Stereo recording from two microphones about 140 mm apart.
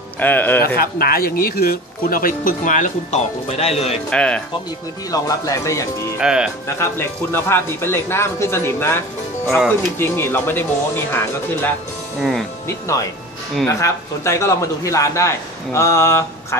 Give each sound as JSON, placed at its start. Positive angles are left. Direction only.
{"t": 0.2, "sound": "speech", "side_deg": 15}
{"t": 0.7, "sound": "speech", "side_deg": 90}
{"t": 4.1, "sound": "speech", "side_deg": 5}
{"t": 5.1, "sound": "a man's voice", "side_deg": 25}
{"t": 6.1, "sound": "speech", "side_deg": -5}
{"t": 6.8, "sound": "speech", "side_deg": 15}
{"t": 12.2, "sound": "speech", "side_deg": 0}
{"t": 12.6, "sound": "a man's voice", "side_deg": 20}